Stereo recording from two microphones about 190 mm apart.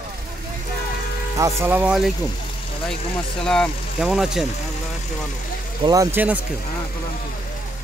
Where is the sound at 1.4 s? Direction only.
15° right (ahead or behind).